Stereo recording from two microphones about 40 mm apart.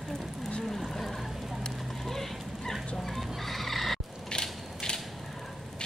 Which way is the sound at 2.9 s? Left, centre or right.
Centre.